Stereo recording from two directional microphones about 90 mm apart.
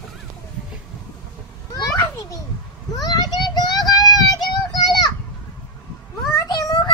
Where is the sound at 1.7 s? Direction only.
45° left (ahead or behind).